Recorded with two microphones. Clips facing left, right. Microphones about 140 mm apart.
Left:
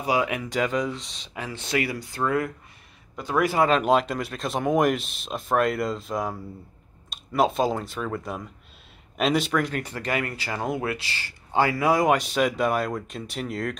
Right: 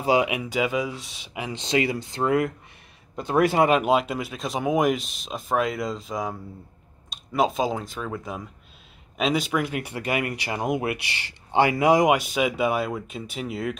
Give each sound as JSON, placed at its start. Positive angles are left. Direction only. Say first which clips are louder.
{"t": 0.0, "sound": "speech", "louder": "right 3 dB", "side_deg": -25}
{"t": 0.3, "sound": "speech", "louder": "even", "side_deg": -10}
{"t": 3.7, "sound": "speech", "louder": "even", "side_deg": -5}
{"t": 12.2, "sound": "speech", "louder": "even", "side_deg": -5}